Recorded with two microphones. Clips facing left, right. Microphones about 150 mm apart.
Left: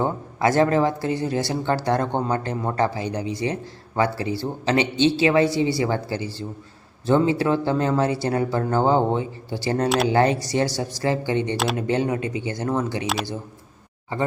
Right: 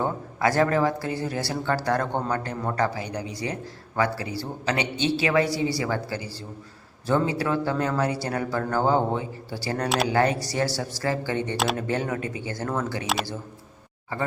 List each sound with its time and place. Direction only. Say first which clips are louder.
0.0 s speech: left 3 dB; 20° left (ahead or behind)
11.5 s speech: left 2 dB; centre (ahead or behind)
11.8 s speech: left 4 dB; 20° left (ahead or behind)
14.1 s speech: left 4 dB; 20° left (ahead or behind)